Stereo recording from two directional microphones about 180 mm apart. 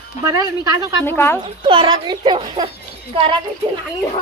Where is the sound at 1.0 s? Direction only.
10° left (ahead or behind).